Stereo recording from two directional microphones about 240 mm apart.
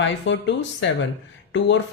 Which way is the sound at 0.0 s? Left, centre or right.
Left.